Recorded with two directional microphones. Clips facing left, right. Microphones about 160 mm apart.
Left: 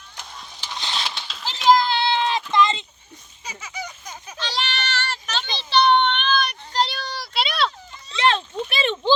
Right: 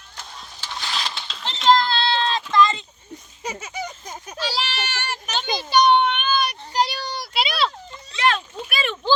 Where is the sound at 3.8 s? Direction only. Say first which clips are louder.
Right 3 dB; 50° right (ahead or behind).